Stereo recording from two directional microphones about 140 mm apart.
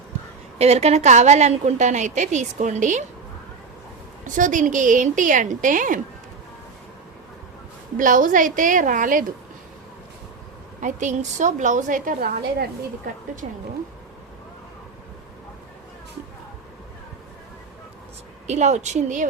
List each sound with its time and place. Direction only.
0.6 s a woman's voice: 50° right (ahead or behind)
4.2 s a woman's voice: 65° right (ahead or behind)
7.9 s a woman's voice: 70° right (ahead or behind)
10.8 s a woman's voice: 60° right (ahead or behind); by 12.6 s 80° right
13.4 s a woman's voice: 60° right (ahead or behind)
18.4 s a woman's voice: 55° right (ahead or behind)